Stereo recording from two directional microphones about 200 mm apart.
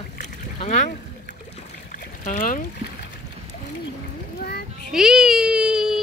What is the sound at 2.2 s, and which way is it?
Speech, 40° left (ahead or behind).